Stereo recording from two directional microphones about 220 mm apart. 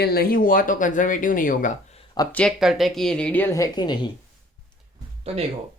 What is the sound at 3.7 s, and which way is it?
Speech, 20° left (ahead or behind).